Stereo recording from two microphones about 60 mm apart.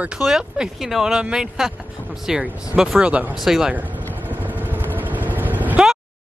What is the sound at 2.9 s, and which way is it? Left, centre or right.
Speech, right.